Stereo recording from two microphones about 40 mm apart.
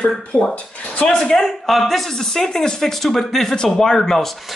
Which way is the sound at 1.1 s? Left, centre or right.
Centre.